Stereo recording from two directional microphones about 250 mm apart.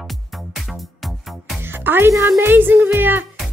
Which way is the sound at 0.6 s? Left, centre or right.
Centre.